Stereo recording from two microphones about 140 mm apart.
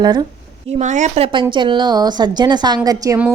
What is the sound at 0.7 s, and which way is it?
A woman's voice, 60° right (ahead or behind).